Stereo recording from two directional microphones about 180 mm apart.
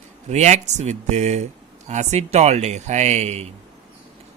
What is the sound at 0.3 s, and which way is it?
Speech, 40° right (ahead or behind).